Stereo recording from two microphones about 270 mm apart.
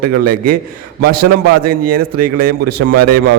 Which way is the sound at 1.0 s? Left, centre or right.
Right.